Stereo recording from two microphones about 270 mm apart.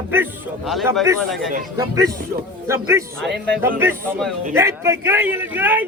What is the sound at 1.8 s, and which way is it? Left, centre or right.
A man's voice, centre.